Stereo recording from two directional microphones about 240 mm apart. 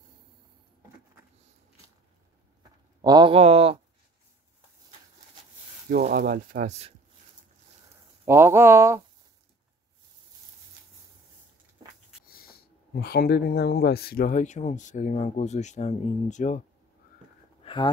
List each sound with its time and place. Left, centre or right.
3.0 s speech: centre
5.9 s speech: right
8.3 s speech: centre
12.3 s speech: left
17.6 s a sound: left